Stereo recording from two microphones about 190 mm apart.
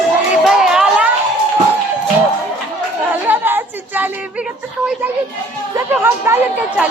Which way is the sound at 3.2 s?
10° right (ahead or behind).